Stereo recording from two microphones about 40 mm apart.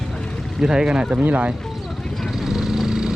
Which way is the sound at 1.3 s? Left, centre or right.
Right.